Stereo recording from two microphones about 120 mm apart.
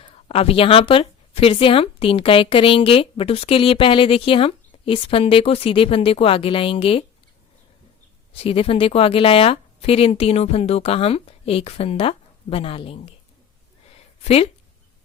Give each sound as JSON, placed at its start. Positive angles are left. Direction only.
{"t": 0.0, "sound": "speech", "side_deg": 50}
{"t": 8.4, "sound": "a woman's voice", "side_deg": 55}